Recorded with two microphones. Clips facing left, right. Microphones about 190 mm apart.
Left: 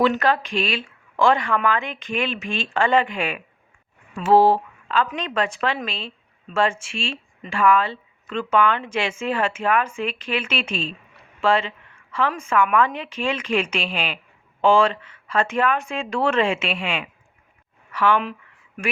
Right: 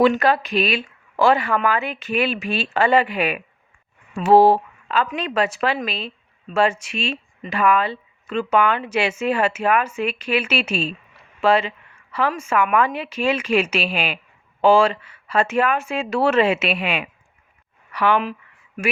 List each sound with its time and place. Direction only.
0.0 s speech: 10° right (ahead or behind)